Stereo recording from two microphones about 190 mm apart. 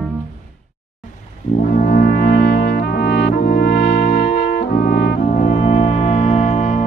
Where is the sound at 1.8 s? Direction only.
50° left (ahead or behind).